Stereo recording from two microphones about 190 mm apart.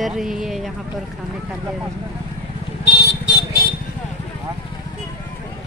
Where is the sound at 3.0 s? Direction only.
60° left (ahead or behind).